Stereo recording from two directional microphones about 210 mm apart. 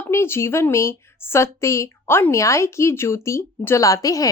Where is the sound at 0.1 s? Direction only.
10° left (ahead or behind).